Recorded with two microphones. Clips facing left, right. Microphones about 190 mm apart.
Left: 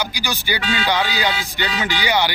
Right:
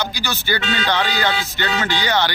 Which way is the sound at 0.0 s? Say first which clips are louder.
Even; 15° left (ahead or behind).